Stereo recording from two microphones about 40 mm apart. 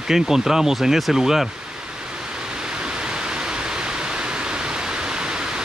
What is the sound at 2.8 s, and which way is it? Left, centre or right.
Pink noise, right.